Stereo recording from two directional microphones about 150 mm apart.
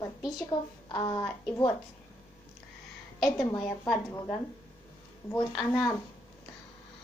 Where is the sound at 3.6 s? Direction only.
5° left (ahead or behind).